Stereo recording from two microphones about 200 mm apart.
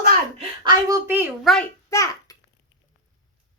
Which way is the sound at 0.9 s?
15° right (ahead or behind).